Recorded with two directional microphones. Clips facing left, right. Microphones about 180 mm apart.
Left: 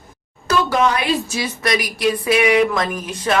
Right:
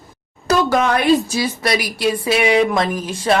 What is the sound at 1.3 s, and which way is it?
Speech, 30° right (ahead or behind).